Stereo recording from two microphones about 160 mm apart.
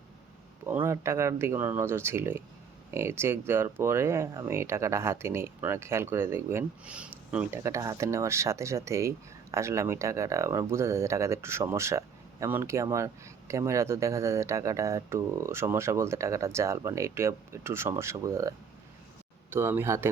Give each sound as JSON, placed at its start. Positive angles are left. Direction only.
{"t": 0.6, "sound": "speech", "side_deg": -15}